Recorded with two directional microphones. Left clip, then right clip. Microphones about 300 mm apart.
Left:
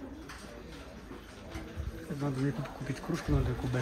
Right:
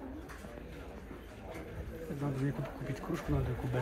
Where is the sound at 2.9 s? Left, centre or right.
Left.